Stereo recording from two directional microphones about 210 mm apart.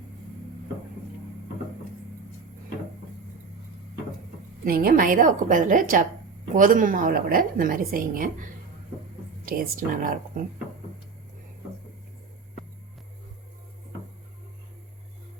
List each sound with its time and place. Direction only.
4.6 s a woman's voice: 45° right (ahead or behind)
9.5 s a woman's voice: 45° right (ahead or behind)